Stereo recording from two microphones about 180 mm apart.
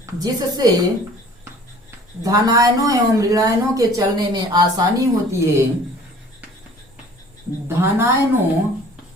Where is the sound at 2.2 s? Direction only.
20° right (ahead or behind).